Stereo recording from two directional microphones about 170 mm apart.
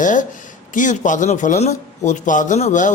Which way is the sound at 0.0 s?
50° left (ahead or behind).